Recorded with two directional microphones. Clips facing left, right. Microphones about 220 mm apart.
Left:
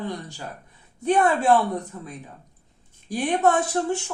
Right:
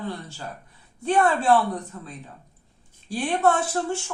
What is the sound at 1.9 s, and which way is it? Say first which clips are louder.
Speech: left 2 dB; 15° left (ahead or behind).